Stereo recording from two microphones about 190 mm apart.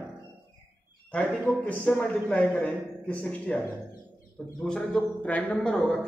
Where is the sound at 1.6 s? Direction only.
5° left (ahead or behind).